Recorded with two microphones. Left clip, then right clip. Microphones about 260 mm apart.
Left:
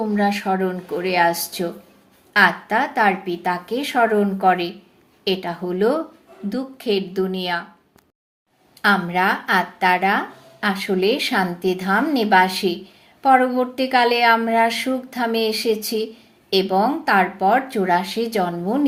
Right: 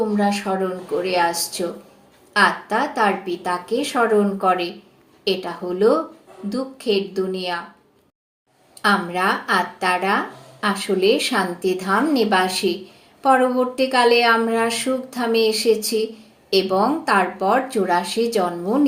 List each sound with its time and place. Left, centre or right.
0.2 s speech: left
8.8 s speech: left